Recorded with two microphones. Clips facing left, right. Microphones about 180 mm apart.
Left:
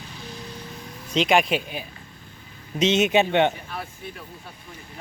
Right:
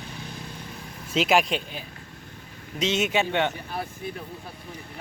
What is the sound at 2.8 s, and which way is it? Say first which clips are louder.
Speech: left 5 dB; 20° left (ahead or behind).